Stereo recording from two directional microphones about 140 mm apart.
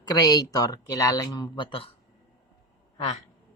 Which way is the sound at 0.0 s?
25° left (ahead or behind).